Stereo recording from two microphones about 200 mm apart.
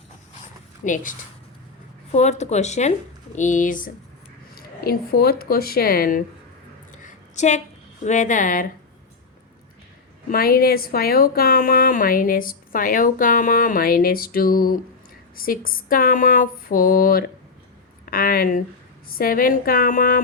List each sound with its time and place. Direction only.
2.1 s speech: 35° left (ahead or behind)
6.9 s a sound: 35° left (ahead or behind)
8.0 s speech: 40° left (ahead or behind)
10.2 s a woman's voice: 45° left (ahead or behind)